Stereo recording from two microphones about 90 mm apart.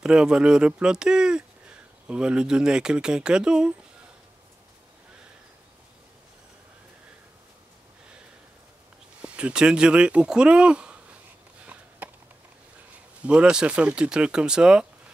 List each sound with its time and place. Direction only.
0.0 s speech: 10° right (ahead or behind)
9.2 s speech: 10° right (ahead or behind)
11.6 s sniff: 15° right (ahead or behind)
13.2 s speech: 10° right (ahead or behind)